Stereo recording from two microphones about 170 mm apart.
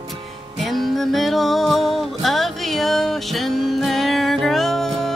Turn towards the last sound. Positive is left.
turn(degrees=0)  # may be behind; listen again after turning